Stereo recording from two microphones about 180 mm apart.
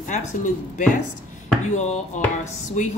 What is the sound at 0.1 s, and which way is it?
A woman's voice, 45° left (ahead or behind).